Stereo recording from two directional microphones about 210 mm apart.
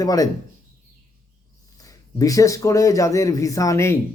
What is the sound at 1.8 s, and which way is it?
Speech, 15° left (ahead or behind).